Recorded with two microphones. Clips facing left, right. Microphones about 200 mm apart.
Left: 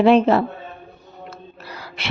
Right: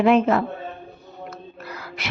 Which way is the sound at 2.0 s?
30° left (ahead or behind).